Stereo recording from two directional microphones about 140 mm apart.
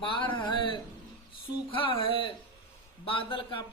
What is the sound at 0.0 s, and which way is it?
Speech, 35° left (ahead or behind).